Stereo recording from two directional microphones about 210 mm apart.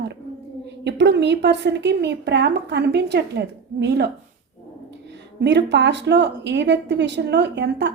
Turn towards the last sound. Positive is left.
turn(degrees=-55)  # may be behind; listen again after turning